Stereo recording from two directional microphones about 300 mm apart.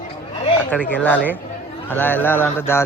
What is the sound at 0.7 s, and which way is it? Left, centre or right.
A man's voice, centre.